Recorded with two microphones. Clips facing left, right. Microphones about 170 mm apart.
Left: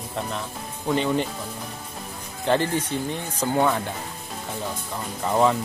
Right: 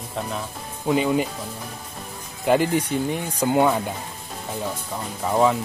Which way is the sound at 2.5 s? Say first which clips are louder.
Right 3 dB; 10° right (ahead or behind).